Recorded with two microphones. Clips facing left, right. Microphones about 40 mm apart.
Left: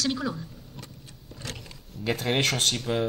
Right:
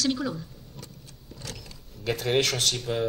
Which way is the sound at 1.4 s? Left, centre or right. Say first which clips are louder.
Left 2 dB; left.